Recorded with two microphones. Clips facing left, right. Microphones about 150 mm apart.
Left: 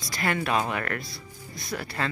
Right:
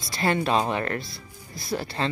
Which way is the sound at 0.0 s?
30° right (ahead or behind).